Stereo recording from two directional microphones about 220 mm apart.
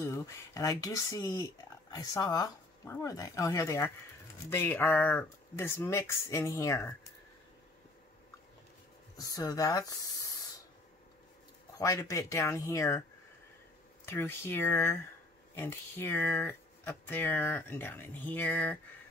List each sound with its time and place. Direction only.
0.0 s speech: 10° left (ahead or behind)
9.3 s speech: 15° left (ahead or behind)
11.8 s speech: 15° left (ahead or behind)
14.0 s speech: 10° left (ahead or behind)